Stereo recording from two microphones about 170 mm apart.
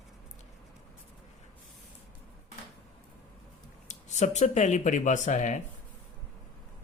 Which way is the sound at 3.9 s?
45° left (ahead or behind).